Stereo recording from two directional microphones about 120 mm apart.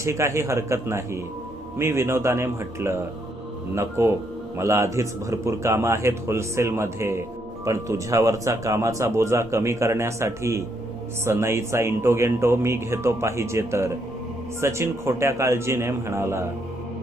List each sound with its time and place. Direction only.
0.0 s speech: 25° right (ahead or behind)